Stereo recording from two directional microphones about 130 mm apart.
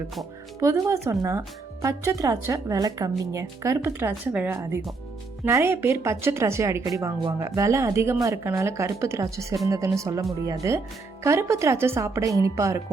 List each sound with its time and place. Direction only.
0.6 s speech: 20° right (ahead or behind)